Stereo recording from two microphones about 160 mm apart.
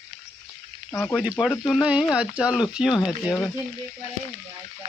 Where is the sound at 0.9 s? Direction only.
15° left (ahead or behind).